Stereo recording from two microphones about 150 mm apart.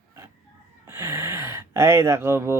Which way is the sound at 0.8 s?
15° right (ahead or behind).